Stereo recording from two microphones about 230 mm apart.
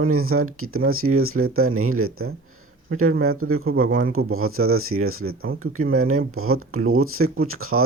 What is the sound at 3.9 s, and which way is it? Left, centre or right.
Speech, right.